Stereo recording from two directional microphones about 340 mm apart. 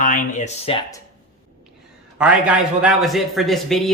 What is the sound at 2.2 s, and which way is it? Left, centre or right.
A man's voice, centre.